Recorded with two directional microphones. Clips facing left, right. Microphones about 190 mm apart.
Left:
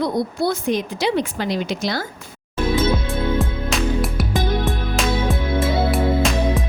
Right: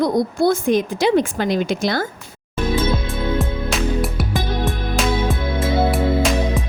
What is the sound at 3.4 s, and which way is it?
Music, centre (ahead or behind).